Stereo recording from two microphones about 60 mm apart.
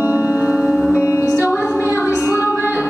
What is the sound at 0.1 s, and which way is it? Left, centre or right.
Music, right.